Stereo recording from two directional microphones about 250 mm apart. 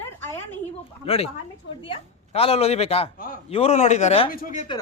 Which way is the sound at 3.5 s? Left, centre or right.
Left.